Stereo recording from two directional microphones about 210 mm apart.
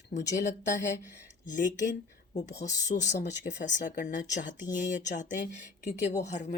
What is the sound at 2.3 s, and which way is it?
Speech, 35° left (ahead or behind).